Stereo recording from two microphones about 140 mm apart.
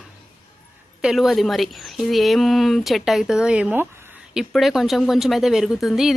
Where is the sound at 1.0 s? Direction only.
Centre (ahead or behind).